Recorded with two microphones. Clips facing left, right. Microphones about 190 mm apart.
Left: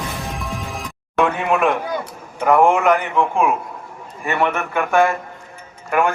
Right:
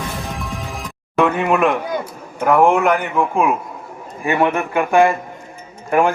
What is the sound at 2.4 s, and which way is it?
A man's voice, centre (ahead or behind).